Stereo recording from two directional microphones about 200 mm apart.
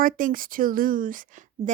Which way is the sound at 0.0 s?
45° right (ahead or behind).